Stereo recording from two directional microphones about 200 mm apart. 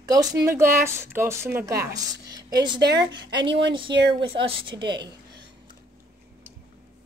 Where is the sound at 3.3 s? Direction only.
60° right (ahead or behind).